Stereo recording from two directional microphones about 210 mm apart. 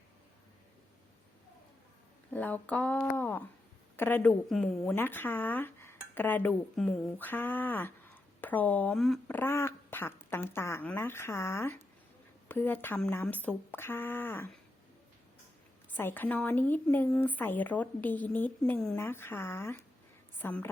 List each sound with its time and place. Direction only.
2.3 s a woman's voice: 10° left (ahead or behind)
15.9 s speech: 10° left (ahead or behind)